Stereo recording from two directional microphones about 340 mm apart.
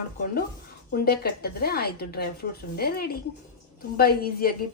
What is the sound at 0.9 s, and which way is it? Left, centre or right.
A woman's voice, left.